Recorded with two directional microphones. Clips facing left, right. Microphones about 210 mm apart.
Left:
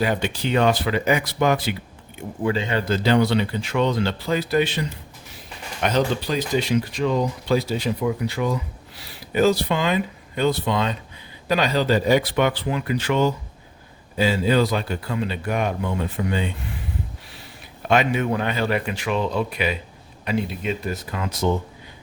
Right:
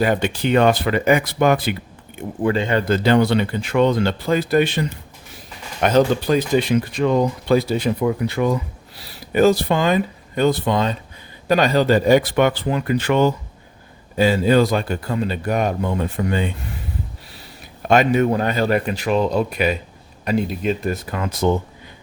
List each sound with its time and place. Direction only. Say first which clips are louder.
0.0 s speech: right 4 dB; 55° right (ahead or behind)
5.8 s speech: right 6 dB; 50° right (ahead or behind)
17.8 s speech: right 5 dB; 45° right (ahead or behind)